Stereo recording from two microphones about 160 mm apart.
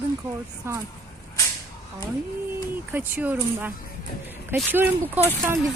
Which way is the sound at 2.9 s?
10° right (ahead or behind).